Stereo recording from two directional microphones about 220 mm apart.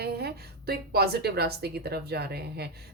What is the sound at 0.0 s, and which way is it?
A woman's voice, 45° right (ahead or behind).